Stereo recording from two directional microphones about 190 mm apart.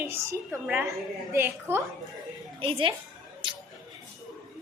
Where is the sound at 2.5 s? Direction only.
30° right (ahead or behind).